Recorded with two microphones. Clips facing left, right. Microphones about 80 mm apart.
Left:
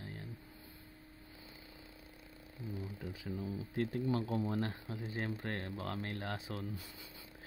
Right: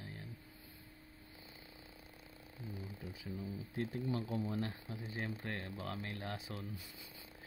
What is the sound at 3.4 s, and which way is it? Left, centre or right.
Speech, left.